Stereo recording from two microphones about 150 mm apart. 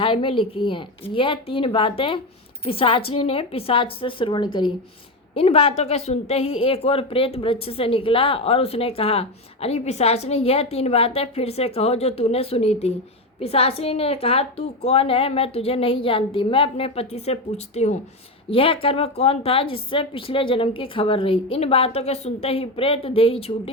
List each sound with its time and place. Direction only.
0.0 s a woman's voice: 35° left (ahead or behind)
18.5 s a woman's voice: 35° left (ahead or behind)